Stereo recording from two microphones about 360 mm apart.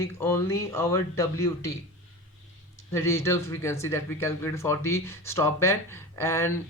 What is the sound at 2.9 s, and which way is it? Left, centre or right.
Speech, centre.